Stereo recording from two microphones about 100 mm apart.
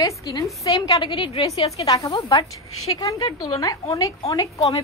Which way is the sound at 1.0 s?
60° left (ahead or behind).